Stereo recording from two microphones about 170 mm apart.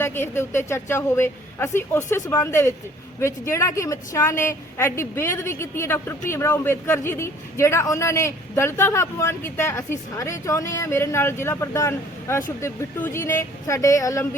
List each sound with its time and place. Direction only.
0.0 s a woman's voice: 15° left (ahead or behind)